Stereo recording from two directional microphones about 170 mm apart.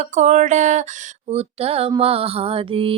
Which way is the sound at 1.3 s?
35° right (ahead or behind).